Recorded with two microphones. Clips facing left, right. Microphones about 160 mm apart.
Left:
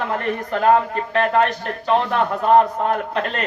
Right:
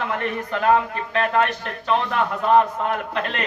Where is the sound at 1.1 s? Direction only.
35° left (ahead or behind).